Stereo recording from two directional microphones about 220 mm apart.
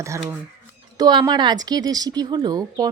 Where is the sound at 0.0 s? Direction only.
15° right (ahead or behind).